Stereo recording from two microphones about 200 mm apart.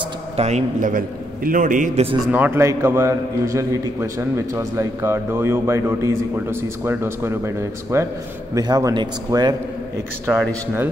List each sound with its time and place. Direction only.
0.4 s a man's voice: 35° right (ahead or behind)
2.3 s a man's voice: 10° right (ahead or behind)
10.3 s speech: 5° right (ahead or behind)